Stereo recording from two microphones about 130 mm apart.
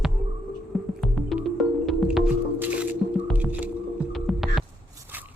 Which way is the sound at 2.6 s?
10° right (ahead or behind).